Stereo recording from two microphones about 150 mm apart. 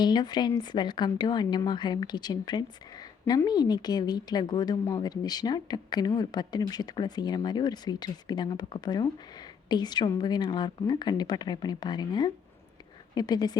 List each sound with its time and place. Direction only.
0.0 s a woman's voice: 30° left (ahead or behind)